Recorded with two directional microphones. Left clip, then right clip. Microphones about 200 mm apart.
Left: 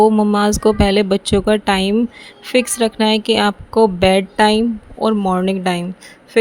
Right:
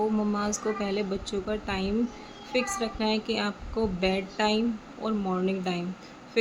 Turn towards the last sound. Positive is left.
turn(degrees=50)  # may be behind; listen again after turning